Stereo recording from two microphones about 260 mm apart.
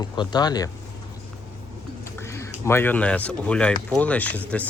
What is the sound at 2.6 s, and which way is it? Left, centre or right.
Speech, centre.